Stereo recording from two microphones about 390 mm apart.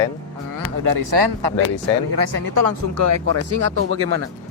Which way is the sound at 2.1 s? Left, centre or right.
Right.